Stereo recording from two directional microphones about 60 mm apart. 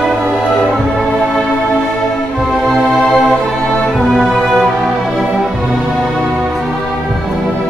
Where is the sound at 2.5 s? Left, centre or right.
Centre.